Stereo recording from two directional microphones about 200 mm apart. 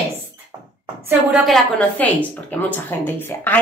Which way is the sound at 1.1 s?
Centre (ahead or behind).